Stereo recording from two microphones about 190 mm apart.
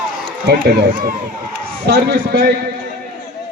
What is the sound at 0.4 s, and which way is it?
A man's voice, 55° right (ahead or behind).